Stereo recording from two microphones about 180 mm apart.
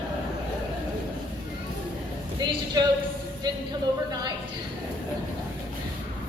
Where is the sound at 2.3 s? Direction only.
20° right (ahead or behind).